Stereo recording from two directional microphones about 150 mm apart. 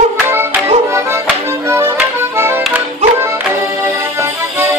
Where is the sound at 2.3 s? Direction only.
15° right (ahead or behind).